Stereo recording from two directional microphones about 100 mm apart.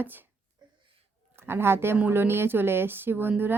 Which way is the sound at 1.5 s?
25° right (ahead or behind).